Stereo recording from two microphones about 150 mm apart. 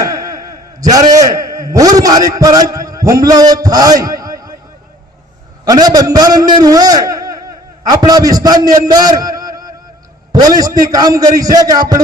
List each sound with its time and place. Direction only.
0.0 s a sound: 25° right (ahead or behind)
1.1 s a man's voice: 20° right (ahead or behind)
5.6 s a man's voice: 25° right (ahead or behind)